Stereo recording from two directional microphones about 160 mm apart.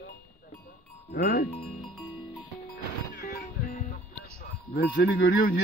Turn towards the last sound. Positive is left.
turn(degrees=70)  # may be behind; listen again after turning